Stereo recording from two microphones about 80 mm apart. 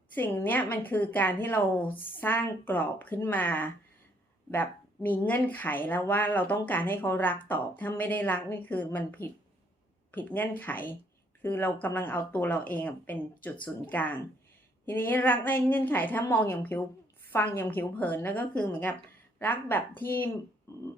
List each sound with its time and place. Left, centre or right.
0.1 s speech: left